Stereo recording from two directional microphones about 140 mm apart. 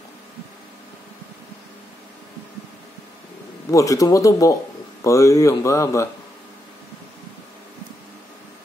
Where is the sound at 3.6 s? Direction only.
25° left (ahead or behind).